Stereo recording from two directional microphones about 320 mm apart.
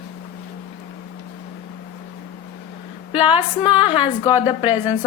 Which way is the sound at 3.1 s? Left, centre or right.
Centre.